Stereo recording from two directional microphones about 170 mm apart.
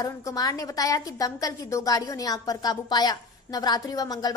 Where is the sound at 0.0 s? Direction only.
20° left (ahead or behind).